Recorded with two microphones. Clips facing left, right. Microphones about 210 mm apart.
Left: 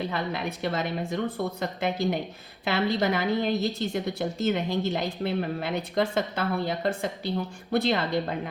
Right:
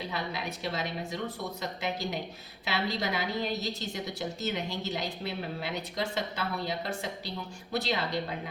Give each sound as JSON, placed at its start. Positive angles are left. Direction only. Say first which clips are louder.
{"t": 0.1, "sound": "a woman's voice", "louder": "left 5 dB", "side_deg": 55}